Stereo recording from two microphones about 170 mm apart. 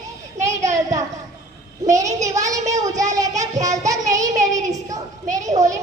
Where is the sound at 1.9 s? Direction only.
20° right (ahead or behind).